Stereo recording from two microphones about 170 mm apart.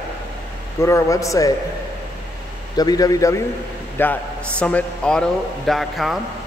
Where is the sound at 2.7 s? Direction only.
25° left (ahead or behind); by 6.1 s centre (ahead or behind).